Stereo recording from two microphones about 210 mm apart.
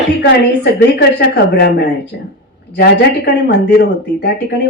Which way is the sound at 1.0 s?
55° left (ahead or behind).